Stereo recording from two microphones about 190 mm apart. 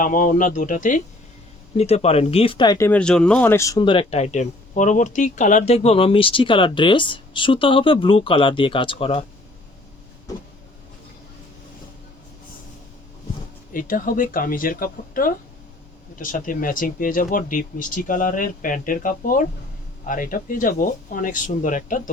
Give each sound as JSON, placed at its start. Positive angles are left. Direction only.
{"t": 0.0, "sound": "speech", "side_deg": 45}
{"t": 13.7, "sound": "speech", "side_deg": 45}